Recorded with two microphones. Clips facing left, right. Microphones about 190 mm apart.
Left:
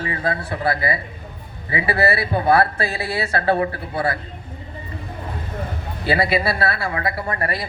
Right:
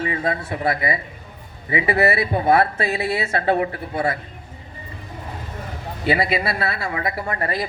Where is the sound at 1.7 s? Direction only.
20° right (ahead or behind).